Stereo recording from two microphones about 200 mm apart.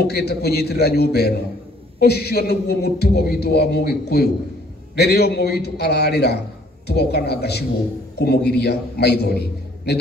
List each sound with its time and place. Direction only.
0.0 s a man's voice: 55° left (ahead or behind)